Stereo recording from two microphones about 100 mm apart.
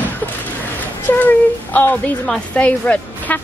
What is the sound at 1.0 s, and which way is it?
Speech, 15° left (ahead or behind).